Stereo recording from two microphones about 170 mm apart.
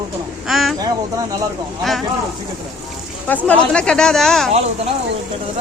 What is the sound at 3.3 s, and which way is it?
A woman's voice, 10° left (ahead or behind).